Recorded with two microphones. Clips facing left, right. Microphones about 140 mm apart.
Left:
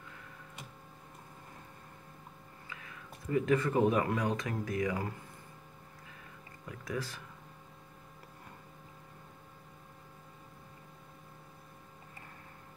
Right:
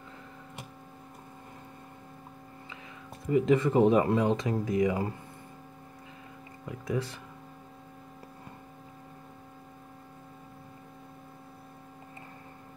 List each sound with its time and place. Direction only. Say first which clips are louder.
3.3 s speech: right 5 dB; 20° right (ahead or behind)
6.7 s speech: right 6 dB; 20° right (ahead or behind)